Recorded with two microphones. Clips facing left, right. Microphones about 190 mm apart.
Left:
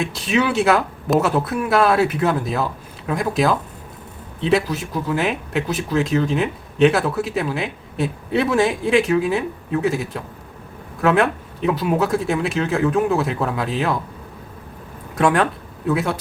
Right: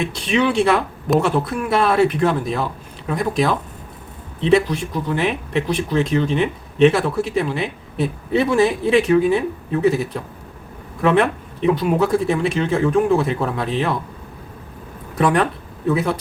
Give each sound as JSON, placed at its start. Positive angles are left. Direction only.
{"t": 0.0, "sound": "speech", "side_deg": 0}
{"t": 15.2, "sound": "speech", "side_deg": 0}